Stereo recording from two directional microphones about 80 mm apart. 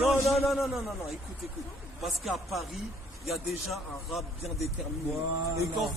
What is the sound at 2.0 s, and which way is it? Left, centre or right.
A man's voice, centre.